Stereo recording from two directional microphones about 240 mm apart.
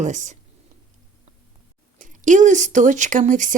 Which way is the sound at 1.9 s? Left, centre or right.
Right.